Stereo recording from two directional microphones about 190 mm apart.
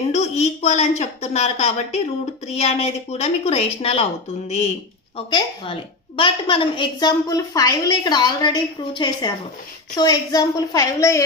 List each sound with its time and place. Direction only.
0.1 s a woman's voice: 35° left (ahead or behind); by 11.2 s 15° left (ahead or behind)